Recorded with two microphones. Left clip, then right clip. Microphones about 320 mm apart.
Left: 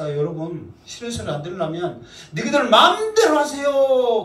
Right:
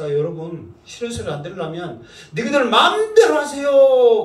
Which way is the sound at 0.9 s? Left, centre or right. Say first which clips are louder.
Right 2 dB; left.